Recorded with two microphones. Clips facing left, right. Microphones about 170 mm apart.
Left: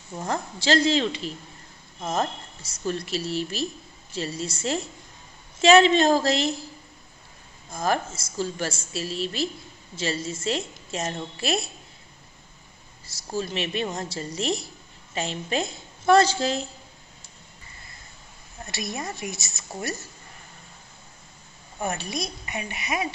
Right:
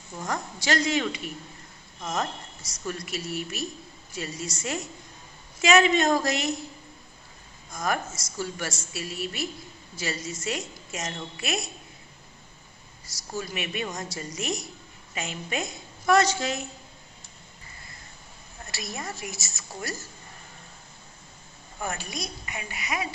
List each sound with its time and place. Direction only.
0.2 s a woman's voice: 30° left (ahead or behind)
7.7 s a woman's voice: 30° left (ahead or behind)
13.0 s a woman's voice: 30° left (ahead or behind)
18.7 s a woman's voice: 20° left (ahead or behind)
21.7 s a woman's voice: 25° left (ahead or behind)